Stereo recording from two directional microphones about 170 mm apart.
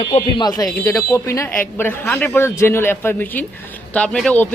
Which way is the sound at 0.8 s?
20° left (ahead or behind).